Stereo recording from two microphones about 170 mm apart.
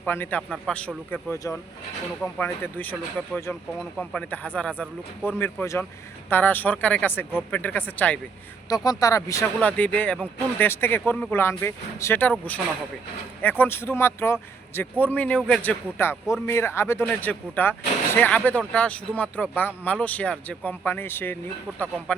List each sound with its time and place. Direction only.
0.0 s speech: 10° left (ahead or behind)
8.7 s speech: 20° left (ahead or behind)
21.7 s speech: 10° right (ahead or behind)